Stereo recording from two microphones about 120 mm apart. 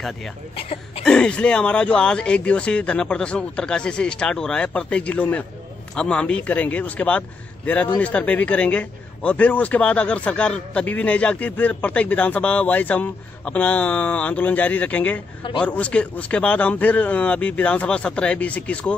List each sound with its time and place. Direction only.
0.6 s speech: 50° left (ahead or behind)
1.0 s a man's voice: 5° left (ahead or behind)